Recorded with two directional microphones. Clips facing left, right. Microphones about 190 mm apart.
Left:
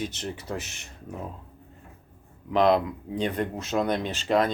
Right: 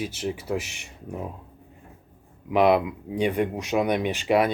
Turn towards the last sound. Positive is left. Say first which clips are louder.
# right 2 dB
turn(degrees=-10)  # may be behind; listen again after turning